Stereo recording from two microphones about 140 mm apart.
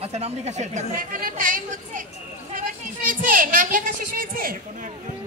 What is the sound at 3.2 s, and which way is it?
A child's voice, 80° right.